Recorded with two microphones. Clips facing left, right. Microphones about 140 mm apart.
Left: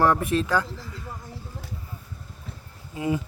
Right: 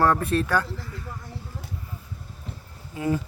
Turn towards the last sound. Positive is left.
turn(degrees=15)  # may be behind; listen again after turning